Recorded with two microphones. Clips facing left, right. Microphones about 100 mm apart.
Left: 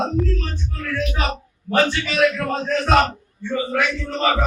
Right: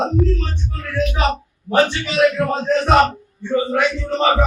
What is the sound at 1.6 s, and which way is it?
A man's voice, 20° right (ahead or behind).